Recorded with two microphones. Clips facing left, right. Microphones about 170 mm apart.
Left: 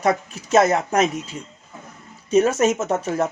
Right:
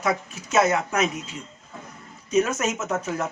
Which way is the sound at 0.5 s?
35° left (ahead or behind).